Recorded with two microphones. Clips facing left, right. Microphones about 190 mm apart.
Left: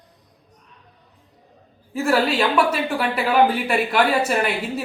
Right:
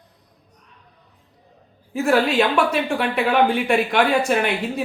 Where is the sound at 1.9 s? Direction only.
Centre (ahead or behind).